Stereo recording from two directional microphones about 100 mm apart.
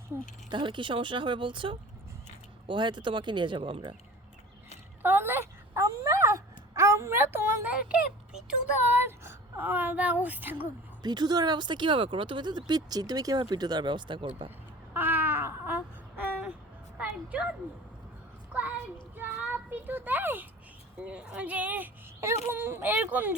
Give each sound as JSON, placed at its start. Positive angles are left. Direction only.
{"t": 0.5, "sound": "speech", "side_deg": -55}
{"t": 5.0, "sound": "wail", "side_deg": -20}
{"t": 9.0, "sound": "speech", "side_deg": -20}
{"t": 11.0, "sound": "speech", "side_deg": -45}
{"t": 14.9, "sound": "a sound", "side_deg": -20}
{"t": 19.1, "sound": "a sound", "side_deg": -20}
{"t": 21.0, "sound": "speech", "side_deg": -10}